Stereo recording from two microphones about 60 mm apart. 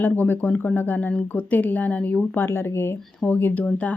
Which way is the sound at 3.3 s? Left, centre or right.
Left.